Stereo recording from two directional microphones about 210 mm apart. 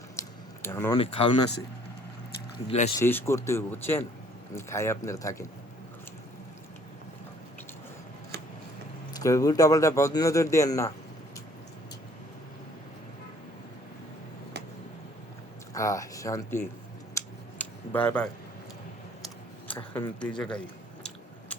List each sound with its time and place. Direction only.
0.2 s a sound: 10° left (ahead or behind)
0.9 s speech: 25° left (ahead or behind)
2.6 s speech: 30° left (ahead or behind)
3.0 s speech: 10° left (ahead or behind)
9.1 s speech: 15° left (ahead or behind)
15.7 s speech: 15° left (ahead or behind)
17.2 s scissors: 5° left (ahead or behind)
19.9 s speech: 5° left (ahead or behind)